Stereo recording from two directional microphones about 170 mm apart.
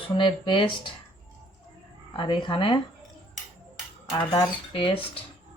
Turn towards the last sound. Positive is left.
turn(degrees=30)  # may be behind; listen again after turning